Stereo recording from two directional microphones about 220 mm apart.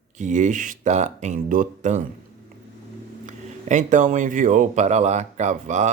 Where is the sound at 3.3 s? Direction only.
35° right (ahead or behind).